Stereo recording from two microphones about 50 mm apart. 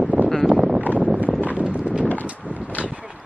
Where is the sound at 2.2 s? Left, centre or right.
Right.